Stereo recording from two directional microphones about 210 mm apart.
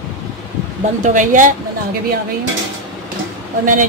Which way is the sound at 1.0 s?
35° right (ahead or behind).